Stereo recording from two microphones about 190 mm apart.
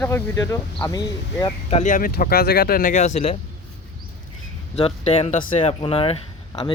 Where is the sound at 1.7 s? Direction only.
40° left (ahead or behind).